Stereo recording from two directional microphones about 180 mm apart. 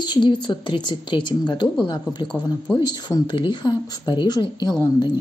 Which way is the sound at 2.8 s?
25° left (ahead or behind).